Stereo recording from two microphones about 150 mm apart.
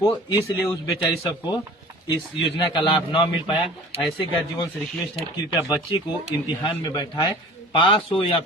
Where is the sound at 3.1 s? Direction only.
30° left (ahead or behind).